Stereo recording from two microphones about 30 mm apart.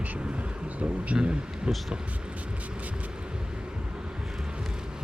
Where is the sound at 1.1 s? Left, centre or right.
Right.